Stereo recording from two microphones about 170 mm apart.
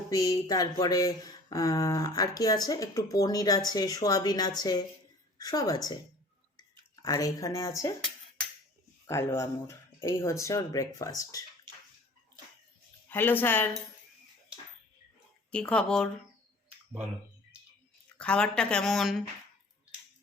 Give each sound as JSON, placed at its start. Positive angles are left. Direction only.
{"t": 0.1, "sound": "speech", "side_deg": 20}
{"t": 6.6, "sound": "chewing", "side_deg": 20}
{"t": 9.0, "sound": "speech", "side_deg": 15}
{"t": 13.1, "sound": "speech", "side_deg": 10}
{"t": 15.5, "sound": "speech", "side_deg": 5}
{"t": 18.2, "sound": "speech", "side_deg": 5}